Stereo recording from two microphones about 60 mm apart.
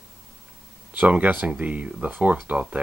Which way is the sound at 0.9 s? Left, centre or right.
Right.